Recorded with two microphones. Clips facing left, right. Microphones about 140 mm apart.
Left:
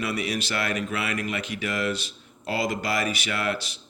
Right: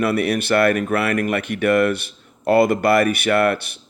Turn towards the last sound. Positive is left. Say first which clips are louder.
# right 11 dB
turn(degrees=-55)  # may be behind; listen again after turning